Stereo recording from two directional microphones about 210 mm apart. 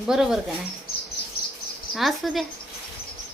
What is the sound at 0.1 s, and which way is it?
Speech, centre (ahead or behind).